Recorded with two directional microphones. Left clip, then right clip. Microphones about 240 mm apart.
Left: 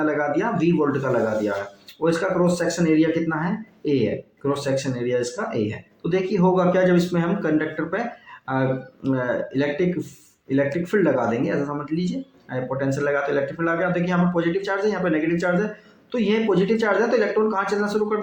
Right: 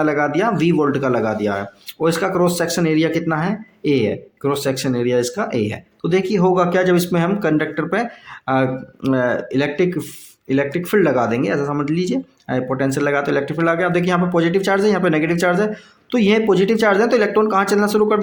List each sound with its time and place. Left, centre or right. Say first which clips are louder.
0.0 s speech: right 5 dB; right
4.4 s speech: right 4 dB; right